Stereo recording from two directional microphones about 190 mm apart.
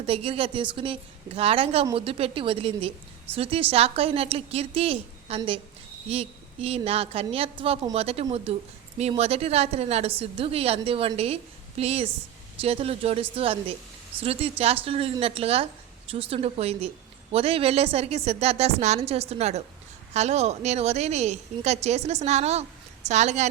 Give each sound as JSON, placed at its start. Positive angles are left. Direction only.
{"t": 0.0, "sound": "a woman's voice", "side_deg": -30}